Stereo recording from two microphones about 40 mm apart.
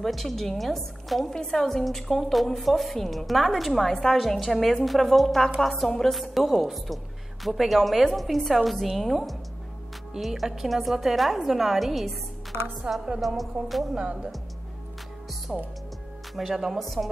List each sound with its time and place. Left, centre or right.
0.0 s a woman's voice: centre
1.3 s a woman's voice: centre
12.9 s speech: right
13.4 s a woman's voice: centre
13.9 s speech: right
15.5 s speech: centre
16.3 s a woman's voice: centre